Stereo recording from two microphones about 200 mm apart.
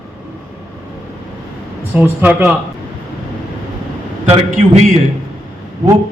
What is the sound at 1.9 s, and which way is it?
Speech, 10° right (ahead or behind).